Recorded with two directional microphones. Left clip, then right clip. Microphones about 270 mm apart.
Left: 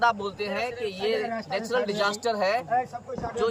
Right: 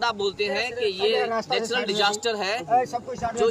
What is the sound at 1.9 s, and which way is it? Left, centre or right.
Speech, centre.